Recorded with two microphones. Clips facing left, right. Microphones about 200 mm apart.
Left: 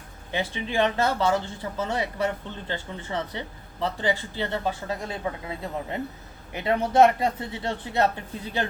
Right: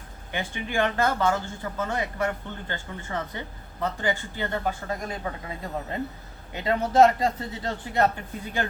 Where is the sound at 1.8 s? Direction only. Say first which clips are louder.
Left 1 dB; 30° left (ahead or behind).